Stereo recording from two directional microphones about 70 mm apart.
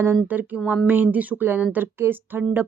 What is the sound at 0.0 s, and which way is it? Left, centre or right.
A woman's voice, right.